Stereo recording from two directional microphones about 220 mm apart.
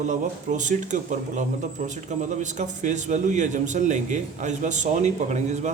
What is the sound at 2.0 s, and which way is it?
A man's voice, 35° right (ahead or behind).